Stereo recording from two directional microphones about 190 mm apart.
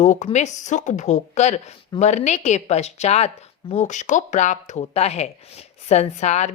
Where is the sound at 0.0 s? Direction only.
40° left (ahead or behind).